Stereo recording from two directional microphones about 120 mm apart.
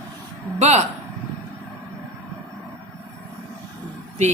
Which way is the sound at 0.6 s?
70° right (ahead or behind).